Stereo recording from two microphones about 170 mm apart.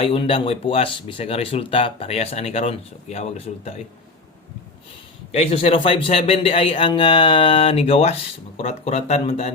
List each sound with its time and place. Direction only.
0.0 s speech: 35° left (ahead or behind)
5.3 s speech: 35° left (ahead or behind)